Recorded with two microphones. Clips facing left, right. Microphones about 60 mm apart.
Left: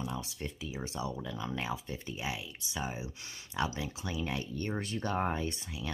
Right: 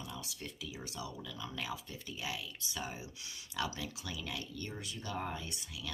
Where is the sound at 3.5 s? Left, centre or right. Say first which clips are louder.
Left 4 dB; left.